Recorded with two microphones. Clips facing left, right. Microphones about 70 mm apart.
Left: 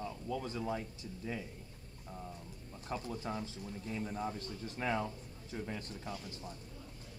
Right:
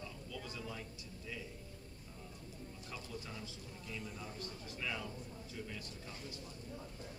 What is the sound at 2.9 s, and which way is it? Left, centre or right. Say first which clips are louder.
A man's voice: left 10 dB; left.